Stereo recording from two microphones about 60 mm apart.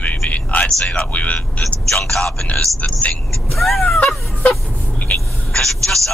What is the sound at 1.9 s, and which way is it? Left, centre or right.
Speech, centre.